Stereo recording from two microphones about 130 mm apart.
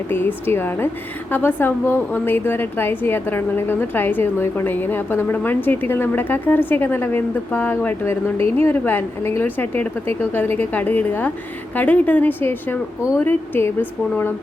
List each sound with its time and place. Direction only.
0.1 s a woman's voice: 15° left (ahead or behind)